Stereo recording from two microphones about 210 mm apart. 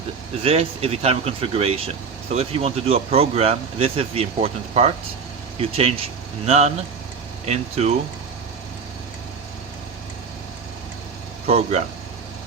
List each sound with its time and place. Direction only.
0.4 s speech: 30° right (ahead or behind)
11.4 s speech: 30° right (ahead or behind)